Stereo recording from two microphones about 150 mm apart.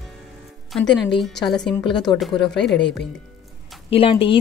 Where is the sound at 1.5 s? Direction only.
Centre (ahead or behind).